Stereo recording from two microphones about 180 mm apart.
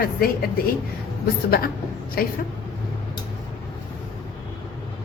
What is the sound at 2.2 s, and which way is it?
Speech, 55° left (ahead or behind).